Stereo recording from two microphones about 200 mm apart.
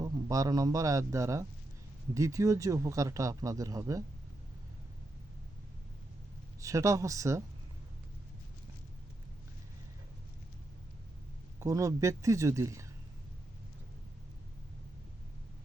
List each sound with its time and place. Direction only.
0.0 s a man's voice: 15° right (ahead or behind)
6.6 s speech: 15° right (ahead or behind)
11.6 s speech: 15° right (ahead or behind)